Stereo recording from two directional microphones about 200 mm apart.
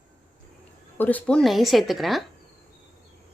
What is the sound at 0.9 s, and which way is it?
A woman's voice, 10° left (ahead or behind).